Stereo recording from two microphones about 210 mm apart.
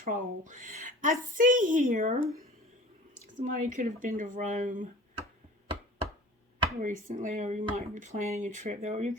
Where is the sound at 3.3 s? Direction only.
35° right (ahead or behind).